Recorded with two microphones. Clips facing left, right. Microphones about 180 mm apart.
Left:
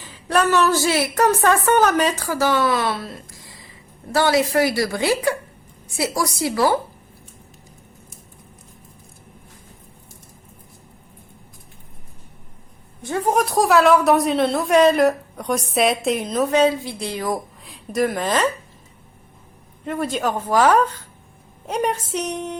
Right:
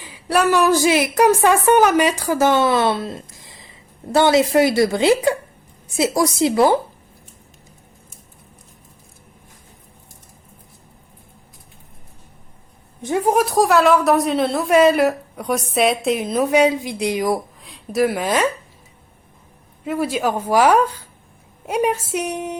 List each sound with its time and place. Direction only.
0.0 s a woman's voice: 10° right (ahead or behind)
13.0 s a sound: 15° right (ahead or behind)
13.3 s speech: centre (ahead or behind)
17.6 s a woman's voice: centre (ahead or behind)
19.8 s a woman's voice: 5° right (ahead or behind)